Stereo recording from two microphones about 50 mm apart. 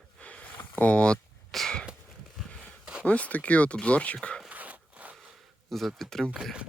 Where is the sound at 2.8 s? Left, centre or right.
Right.